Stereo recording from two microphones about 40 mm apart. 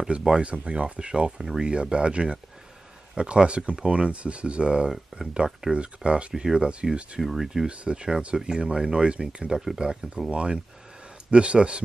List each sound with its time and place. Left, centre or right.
0.1 s speech: centre
0.4 s speech: right
1.4 s speech: centre
1.7 s speech: right
7.2 s speech: centre
7.6 s speech: right